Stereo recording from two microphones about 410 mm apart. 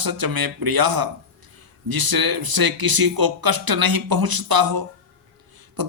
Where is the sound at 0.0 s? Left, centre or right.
Right.